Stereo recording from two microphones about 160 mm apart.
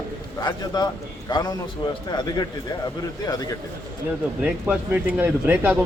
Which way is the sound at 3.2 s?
25° left (ahead or behind).